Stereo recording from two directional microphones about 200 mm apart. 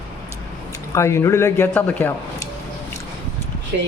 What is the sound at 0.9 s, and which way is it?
Speech, 15° left (ahead or behind).